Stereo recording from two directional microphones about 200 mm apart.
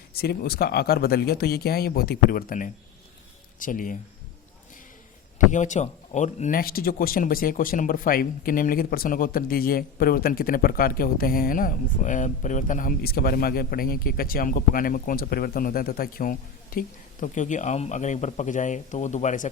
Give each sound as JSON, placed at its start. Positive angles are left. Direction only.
{"t": 0.1, "sound": "speech", "side_deg": 50}
{"t": 5.5, "sound": "speech", "side_deg": 35}